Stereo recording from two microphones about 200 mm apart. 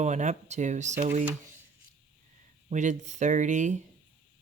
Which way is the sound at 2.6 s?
35° right (ahead or behind).